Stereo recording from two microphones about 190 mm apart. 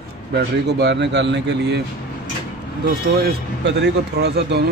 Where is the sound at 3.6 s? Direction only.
65° right (ahead or behind).